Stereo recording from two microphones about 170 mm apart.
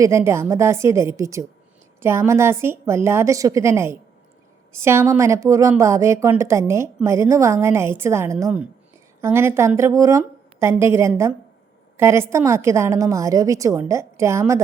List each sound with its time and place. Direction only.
0.0 s speech: 15° right (ahead or behind)